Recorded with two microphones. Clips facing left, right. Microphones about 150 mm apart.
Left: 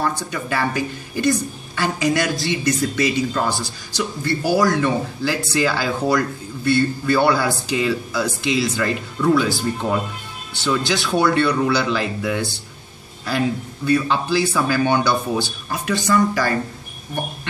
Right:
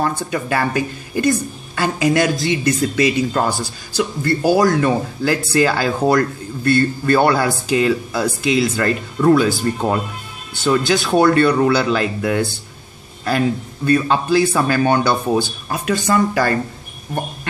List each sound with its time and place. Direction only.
0.0 s speech: 50° right (ahead or behind)
10.6 s speech: 50° right (ahead or behind)
13.8 s speech: 50° right (ahead or behind)